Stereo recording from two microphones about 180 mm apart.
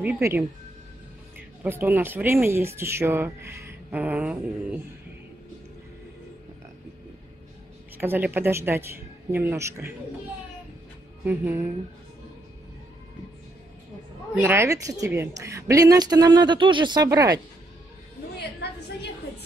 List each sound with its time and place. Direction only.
0.0 s speech: 10° right (ahead or behind)
1.6 s speech: 10° right (ahead or behind)
8.0 s speech: 10° right (ahead or behind)
11.2 s speech: 10° right (ahead or behind)
14.3 s a woman's voice: 15° right (ahead or behind)